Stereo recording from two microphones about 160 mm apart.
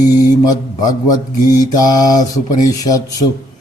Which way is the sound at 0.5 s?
25° left (ahead or behind).